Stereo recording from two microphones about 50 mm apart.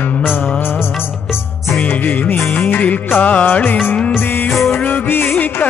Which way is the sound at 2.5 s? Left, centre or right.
Left.